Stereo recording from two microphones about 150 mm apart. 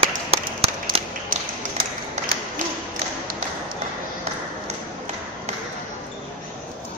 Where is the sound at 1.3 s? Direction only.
75° right (ahead or behind).